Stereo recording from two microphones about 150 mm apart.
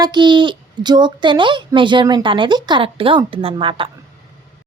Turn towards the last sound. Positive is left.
turn(degrees=-35)  # may be behind; listen again after turning